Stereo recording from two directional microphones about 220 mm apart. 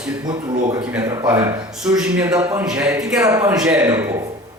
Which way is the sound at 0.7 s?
10° right (ahead or behind).